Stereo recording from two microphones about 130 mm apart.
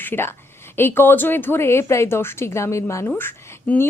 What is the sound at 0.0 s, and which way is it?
Speech, 15° left (ahead or behind).